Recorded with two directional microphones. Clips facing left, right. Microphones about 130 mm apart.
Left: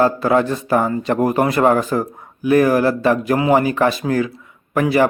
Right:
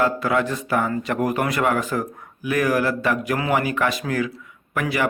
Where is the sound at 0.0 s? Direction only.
35° left (ahead or behind).